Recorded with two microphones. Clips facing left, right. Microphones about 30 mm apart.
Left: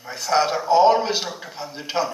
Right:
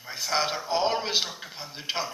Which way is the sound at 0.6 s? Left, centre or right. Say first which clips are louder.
Left 10 dB; centre.